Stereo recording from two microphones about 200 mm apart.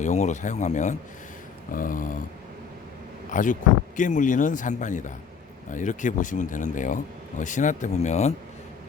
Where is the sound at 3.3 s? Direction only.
40° left (ahead or behind).